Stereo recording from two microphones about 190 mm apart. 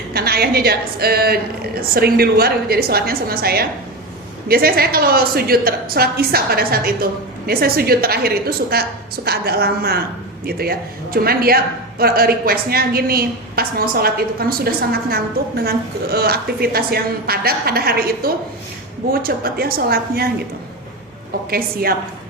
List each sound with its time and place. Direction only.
0.1 s a woman's voice: 55° right (ahead or behind)
21.5 s a woman's voice: 50° right (ahead or behind)